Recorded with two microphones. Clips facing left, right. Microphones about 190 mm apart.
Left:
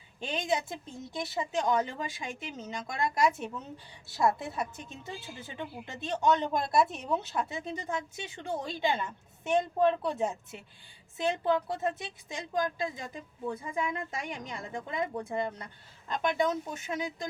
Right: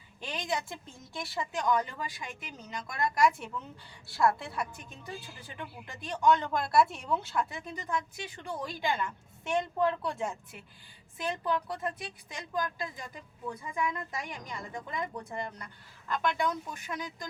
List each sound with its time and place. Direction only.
0.2 s speech: 25° left (ahead or behind)